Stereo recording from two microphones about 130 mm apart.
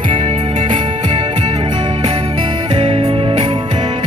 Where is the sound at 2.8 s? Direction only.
50° right (ahead or behind).